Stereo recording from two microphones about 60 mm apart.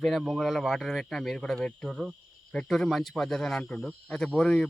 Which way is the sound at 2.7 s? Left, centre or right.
Centre.